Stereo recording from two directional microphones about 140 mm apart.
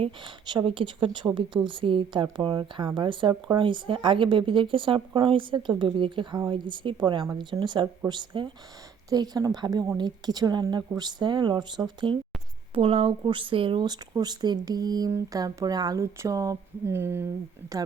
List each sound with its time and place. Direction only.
0.0 s speech: 35° right (ahead or behind)
12.7 s speech: 40° right (ahead or behind); by 17.2 s 15° right (ahead or behind)